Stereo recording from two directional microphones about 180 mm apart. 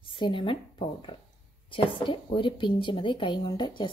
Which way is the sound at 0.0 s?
30° left (ahead or behind).